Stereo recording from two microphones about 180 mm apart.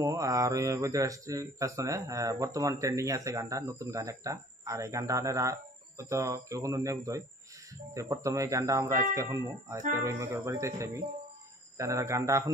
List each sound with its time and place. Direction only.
0.0 s speech: 15° right (ahead or behind)